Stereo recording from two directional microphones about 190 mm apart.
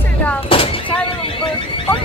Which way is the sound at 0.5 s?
30° left (ahead or behind).